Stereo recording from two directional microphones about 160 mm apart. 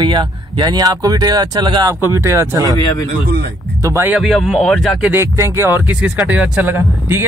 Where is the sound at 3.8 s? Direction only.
20° right (ahead or behind).